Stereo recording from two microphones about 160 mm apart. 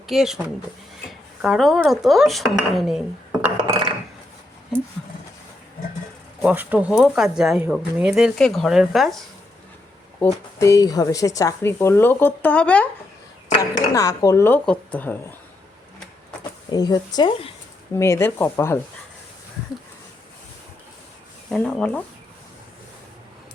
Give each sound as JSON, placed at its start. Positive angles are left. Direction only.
{"t": 0.1, "sound": "speech", "side_deg": -5}
{"t": 3.6, "sound": "dishes", "side_deg": -30}
{"t": 6.4, "sound": "speech", "side_deg": -10}
{"t": 10.6, "sound": "speech", "side_deg": 20}
{"t": 13.7, "sound": "speech", "side_deg": 20}
{"t": 16.7, "sound": "speech", "side_deg": 25}
{"t": 17.9, "sound": "speech", "side_deg": 15}
{"t": 21.5, "sound": "speech", "side_deg": 5}